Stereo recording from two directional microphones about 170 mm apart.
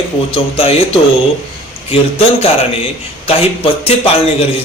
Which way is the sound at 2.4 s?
35° left (ahead or behind).